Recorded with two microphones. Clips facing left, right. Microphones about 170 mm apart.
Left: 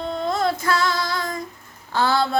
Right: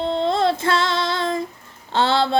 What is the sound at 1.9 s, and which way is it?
Speech, 25° right (ahead or behind).